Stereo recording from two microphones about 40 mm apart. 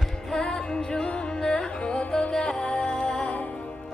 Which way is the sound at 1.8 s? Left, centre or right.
Left.